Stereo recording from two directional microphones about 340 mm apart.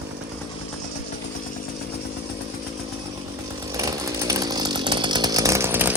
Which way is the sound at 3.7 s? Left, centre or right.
Centre.